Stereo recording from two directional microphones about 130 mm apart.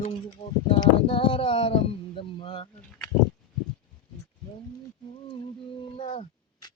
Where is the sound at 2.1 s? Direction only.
40° left (ahead or behind).